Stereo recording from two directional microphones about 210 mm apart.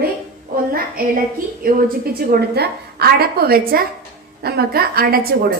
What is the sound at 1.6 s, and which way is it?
A woman's voice, 40° right (ahead or behind).